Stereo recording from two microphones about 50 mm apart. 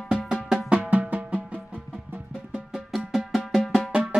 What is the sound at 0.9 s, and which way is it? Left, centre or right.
Music, right.